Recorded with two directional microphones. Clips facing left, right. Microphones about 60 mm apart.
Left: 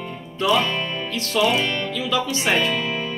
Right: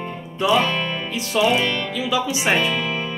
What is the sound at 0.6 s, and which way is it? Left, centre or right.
Music, right.